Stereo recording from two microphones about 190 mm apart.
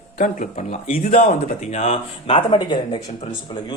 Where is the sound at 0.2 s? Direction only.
40° left (ahead or behind).